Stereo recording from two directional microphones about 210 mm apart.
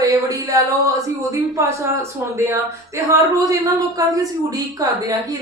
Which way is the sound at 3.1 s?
15° right (ahead or behind).